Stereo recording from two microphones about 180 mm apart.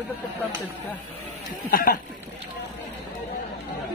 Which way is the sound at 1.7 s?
50° left (ahead or behind).